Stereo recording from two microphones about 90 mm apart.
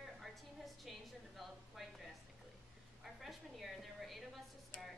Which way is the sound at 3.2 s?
Centre (ahead or behind).